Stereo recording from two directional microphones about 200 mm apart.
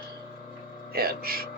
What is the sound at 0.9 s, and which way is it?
Speech, 50° right (ahead or behind).